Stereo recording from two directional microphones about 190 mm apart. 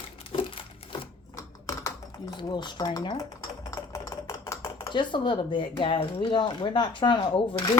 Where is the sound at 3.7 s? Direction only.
15° left (ahead or behind).